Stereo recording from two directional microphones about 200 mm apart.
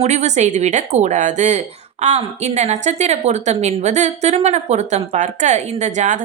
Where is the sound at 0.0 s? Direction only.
35° right (ahead or behind).